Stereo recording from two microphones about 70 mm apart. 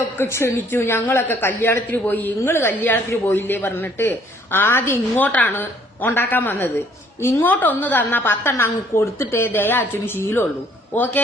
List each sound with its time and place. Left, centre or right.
0.2 s a man's voice: left
5.2 s a man's voice: left